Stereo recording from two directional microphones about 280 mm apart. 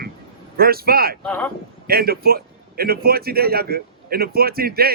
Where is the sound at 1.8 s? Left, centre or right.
Right.